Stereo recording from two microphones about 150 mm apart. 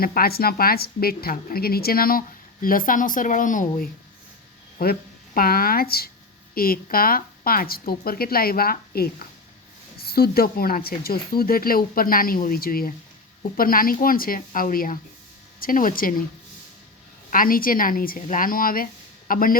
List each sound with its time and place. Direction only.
0.0 s a woman's voice: 85° left; by 3.8 s 60° left (ahead or behind)
4.8 s a woman's voice: 80° left
17.3 s a woman's voice: 70° left (ahead or behind)